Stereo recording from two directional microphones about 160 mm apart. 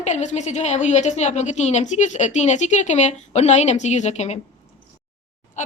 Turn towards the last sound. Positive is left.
turn(degrees=45)  # may be behind; listen again after turning